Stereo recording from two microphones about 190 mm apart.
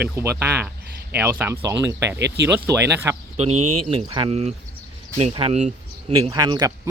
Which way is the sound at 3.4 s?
30° right (ahead or behind).